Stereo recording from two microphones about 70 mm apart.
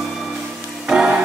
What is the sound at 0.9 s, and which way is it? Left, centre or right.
Music, centre.